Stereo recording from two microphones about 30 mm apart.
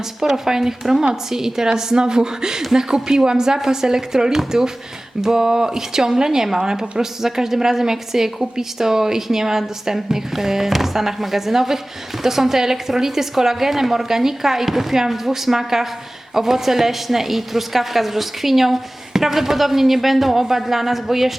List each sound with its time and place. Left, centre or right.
0.3 s speech: centre